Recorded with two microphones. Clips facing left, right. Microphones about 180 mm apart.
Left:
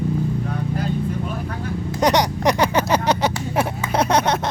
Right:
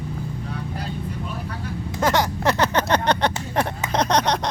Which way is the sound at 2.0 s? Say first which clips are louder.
Left 3 dB; 20° left (ahead or behind).